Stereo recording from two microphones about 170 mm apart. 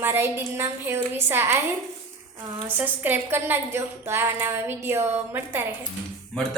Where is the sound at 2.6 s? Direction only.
10° right (ahead or behind).